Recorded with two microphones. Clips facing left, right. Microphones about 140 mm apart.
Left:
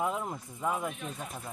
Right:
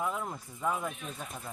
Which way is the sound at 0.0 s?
15° left (ahead or behind).